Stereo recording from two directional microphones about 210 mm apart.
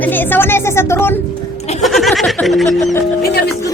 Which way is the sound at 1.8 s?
Centre (ahead or behind).